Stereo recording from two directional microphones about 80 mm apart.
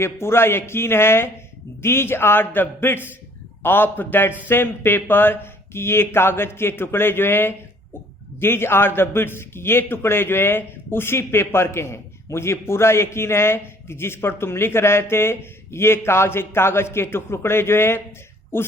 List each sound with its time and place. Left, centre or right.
0.0 s a man's voice: left